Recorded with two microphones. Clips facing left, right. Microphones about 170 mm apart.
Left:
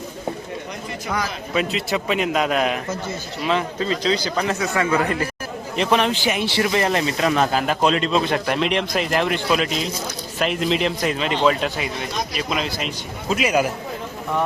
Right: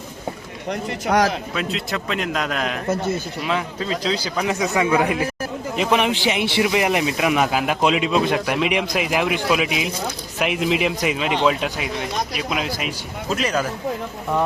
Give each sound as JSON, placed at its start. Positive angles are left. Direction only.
{"t": 0.7, "sound": "speech", "side_deg": -70}
{"t": 1.5, "sound": "speech", "side_deg": 5}
{"t": 4.4, "sound": "speech", "side_deg": -20}
{"t": 6.2, "sound": "speech", "side_deg": -20}
{"t": 13.3, "sound": "speech", "side_deg": 10}